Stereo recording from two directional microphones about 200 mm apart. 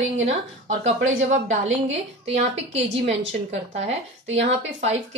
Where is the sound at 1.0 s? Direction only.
75° right (ahead or behind).